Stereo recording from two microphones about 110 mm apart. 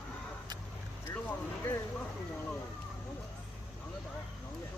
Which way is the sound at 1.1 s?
20° left (ahead or behind).